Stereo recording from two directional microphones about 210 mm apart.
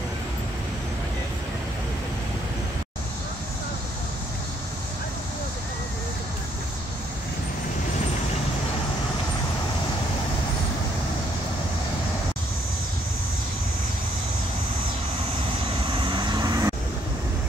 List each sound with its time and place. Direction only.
16.0 s vehicle: 20° right (ahead or behind)